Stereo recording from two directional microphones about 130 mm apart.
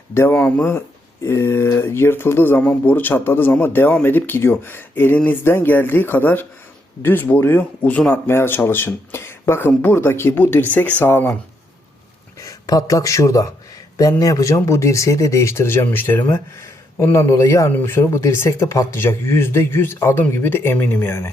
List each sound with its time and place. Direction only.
0.1 s speech: 20° left (ahead or behind)
0.3 s speech: 10° left (ahead or behind)
12.4 s speech: 25° left (ahead or behind)